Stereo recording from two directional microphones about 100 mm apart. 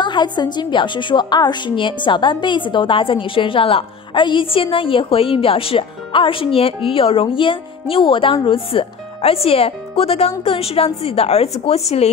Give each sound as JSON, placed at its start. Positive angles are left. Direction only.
{"t": 0.0, "sound": "a woman's voice", "side_deg": 50}